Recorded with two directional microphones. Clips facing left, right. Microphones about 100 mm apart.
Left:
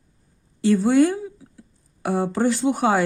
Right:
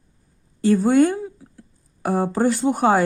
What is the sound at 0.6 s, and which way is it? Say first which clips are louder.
Speech: right 1 dB; 40° right (ahead or behind).